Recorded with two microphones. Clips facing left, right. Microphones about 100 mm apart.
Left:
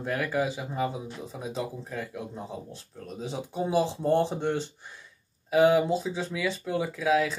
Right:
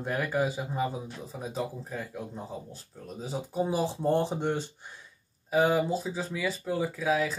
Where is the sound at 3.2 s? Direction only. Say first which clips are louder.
Right 1 dB; 10° right (ahead or behind).